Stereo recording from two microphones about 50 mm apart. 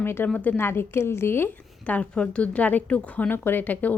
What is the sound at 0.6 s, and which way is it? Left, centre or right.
Speech, left.